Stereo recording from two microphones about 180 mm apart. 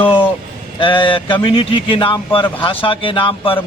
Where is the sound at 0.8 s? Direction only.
30° left (ahead or behind).